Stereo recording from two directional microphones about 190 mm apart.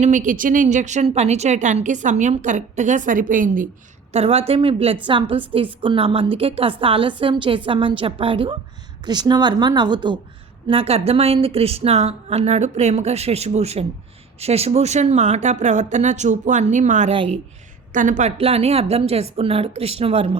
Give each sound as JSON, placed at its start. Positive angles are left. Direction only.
{"t": 0.0, "sound": "a woman's voice", "side_deg": -40}
{"t": 4.1, "sound": "a woman's voice", "side_deg": -35}